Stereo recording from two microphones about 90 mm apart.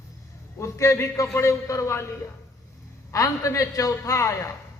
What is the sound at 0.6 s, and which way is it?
A man's voice, 35° left (ahead or behind).